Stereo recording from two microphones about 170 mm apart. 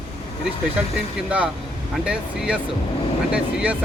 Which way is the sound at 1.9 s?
5° right (ahead or behind).